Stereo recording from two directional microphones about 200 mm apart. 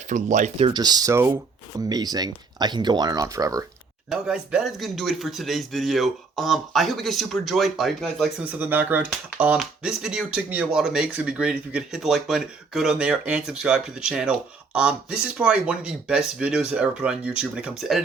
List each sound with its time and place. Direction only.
0.1 s speech: 40° right (ahead or behind)
0.7 s speech: 20° right (ahead or behind)
4.1 s speech: 5° right (ahead or behind)